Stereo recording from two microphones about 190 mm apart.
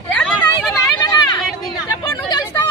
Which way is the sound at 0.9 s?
20° left (ahead or behind).